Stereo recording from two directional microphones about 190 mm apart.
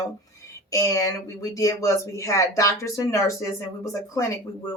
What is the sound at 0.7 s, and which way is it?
A woman's voice, 15° left (ahead or behind).